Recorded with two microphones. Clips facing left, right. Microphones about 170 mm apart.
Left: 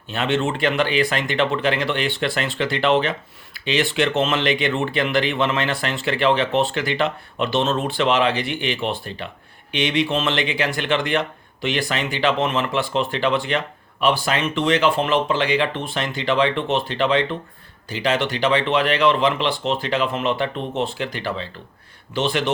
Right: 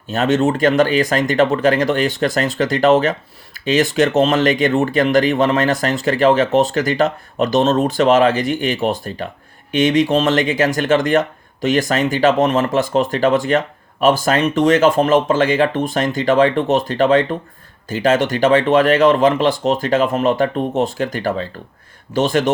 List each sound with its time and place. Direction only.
0.1 s speech: 45° right (ahead or behind)